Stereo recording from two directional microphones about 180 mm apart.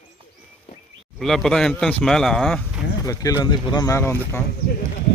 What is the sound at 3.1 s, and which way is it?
Speech, 20° left (ahead or behind).